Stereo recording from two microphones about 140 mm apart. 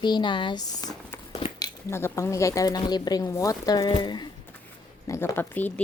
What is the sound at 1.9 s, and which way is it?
Speech, 20° left (ahead or behind).